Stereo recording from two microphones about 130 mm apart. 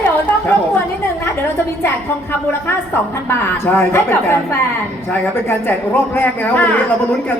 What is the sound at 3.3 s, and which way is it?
A woman's voice, 20° left (ahead or behind).